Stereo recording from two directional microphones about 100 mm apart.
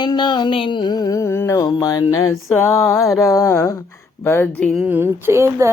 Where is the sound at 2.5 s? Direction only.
25° left (ahead or behind).